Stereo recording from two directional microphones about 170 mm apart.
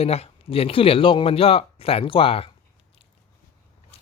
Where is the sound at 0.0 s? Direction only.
35° left (ahead or behind).